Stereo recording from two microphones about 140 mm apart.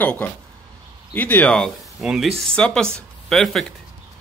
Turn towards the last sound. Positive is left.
turn(degrees=5)  # may be behind; listen again after turning